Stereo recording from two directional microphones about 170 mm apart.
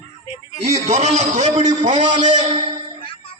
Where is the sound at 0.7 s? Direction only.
40° right (ahead or behind).